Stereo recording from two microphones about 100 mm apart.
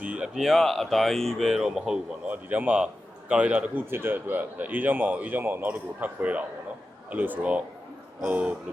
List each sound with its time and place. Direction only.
0.0 s speech: 10° right (ahead or behind)